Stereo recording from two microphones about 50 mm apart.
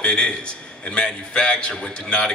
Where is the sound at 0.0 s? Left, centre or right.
Centre.